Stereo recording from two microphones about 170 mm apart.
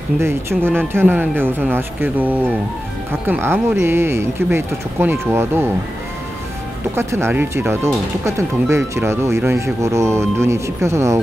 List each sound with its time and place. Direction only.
0.2 s speech: 15° right (ahead or behind)
7.0 s speech: 15° right (ahead or behind)